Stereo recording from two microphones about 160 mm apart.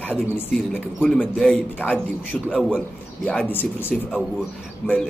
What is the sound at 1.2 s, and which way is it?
Speech, 5° left (ahead or behind).